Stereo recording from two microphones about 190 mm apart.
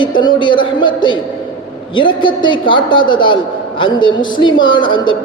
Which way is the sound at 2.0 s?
25° left (ahead or behind).